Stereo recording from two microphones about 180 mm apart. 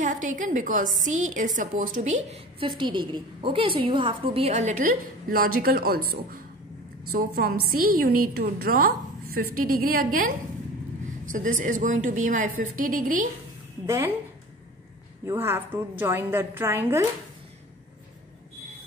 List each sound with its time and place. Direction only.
0.0 s a woman's voice: 45° right (ahead or behind)
7.1 s a woman's voice: 55° right (ahead or behind)
13.8 s a woman's voice: 15° right (ahead or behind)
15.2 s a woman's voice: 15° right (ahead or behind)